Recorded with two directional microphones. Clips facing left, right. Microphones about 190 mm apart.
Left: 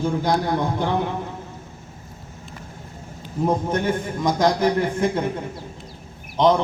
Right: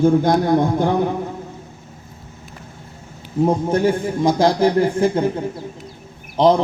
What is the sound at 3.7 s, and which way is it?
A man's voice, 30° right (ahead or behind).